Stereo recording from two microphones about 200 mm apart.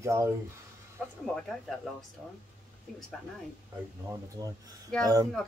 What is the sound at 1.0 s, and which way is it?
Speech, centre (ahead or behind).